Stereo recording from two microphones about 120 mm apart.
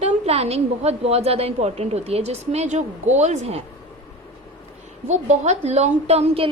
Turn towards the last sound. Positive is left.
turn(degrees=-55)  # may be behind; listen again after turning